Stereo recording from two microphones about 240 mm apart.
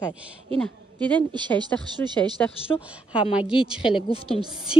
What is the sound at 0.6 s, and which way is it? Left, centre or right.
A woman's voice, centre.